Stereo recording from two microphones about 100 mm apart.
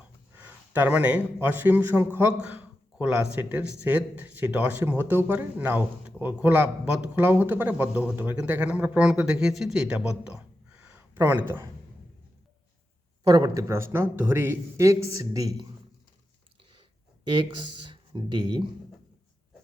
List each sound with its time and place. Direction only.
0.3 s a man's voice: 20° right (ahead or behind)
10.8 s a sound: 15° right (ahead or behind)
13.2 s speech: 35° right (ahead or behind)
17.3 s speech: 50° right (ahead or behind)